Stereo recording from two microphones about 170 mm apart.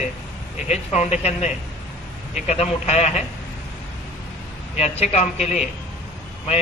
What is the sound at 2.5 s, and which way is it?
Speech, 40° left (ahead or behind).